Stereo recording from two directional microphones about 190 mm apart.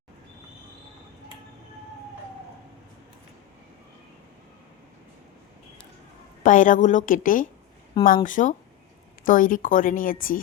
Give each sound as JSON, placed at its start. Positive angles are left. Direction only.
{"t": 6.4, "sound": "speech", "side_deg": 45}